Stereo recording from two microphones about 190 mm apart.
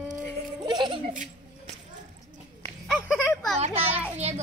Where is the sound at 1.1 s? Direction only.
40° right (ahead or behind).